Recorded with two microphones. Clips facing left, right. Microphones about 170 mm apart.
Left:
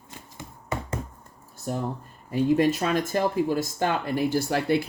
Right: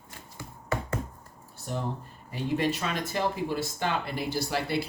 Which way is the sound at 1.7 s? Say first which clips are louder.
Left 4 dB; 45° left (ahead or behind).